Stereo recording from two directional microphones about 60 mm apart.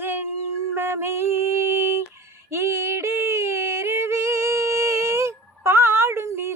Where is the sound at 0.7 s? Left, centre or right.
Right.